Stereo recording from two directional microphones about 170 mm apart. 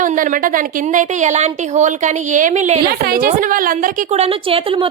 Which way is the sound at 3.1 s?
60° right (ahead or behind).